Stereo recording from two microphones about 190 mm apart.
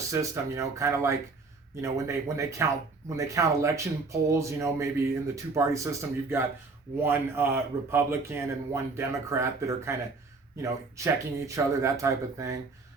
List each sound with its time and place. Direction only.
0.1 s a man's voice: 15° right (ahead or behind)